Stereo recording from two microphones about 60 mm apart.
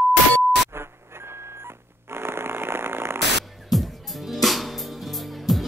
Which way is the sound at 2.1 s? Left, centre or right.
Right.